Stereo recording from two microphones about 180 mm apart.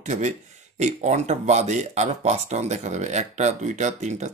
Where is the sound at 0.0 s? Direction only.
40° right (ahead or behind).